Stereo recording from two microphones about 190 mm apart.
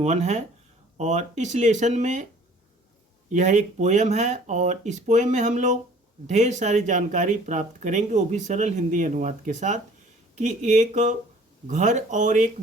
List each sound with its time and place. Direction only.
0.0 s speech: 35° right (ahead or behind)
3.3 s speech: 40° right (ahead or behind)